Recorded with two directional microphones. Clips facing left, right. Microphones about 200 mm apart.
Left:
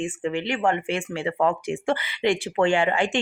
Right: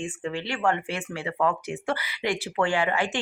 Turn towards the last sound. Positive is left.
turn(degrees=25)  # may be behind; listen again after turning